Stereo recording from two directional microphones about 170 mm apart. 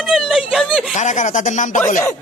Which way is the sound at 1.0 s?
45° left (ahead or behind).